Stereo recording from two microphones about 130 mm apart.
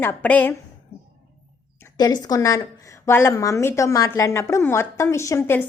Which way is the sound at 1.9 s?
30° left (ahead or behind).